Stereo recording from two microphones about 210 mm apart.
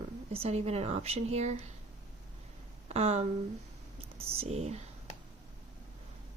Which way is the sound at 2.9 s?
30° right (ahead or behind).